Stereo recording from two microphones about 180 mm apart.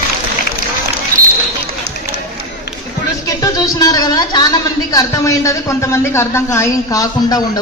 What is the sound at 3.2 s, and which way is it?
A woman's voice, 20° left (ahead or behind).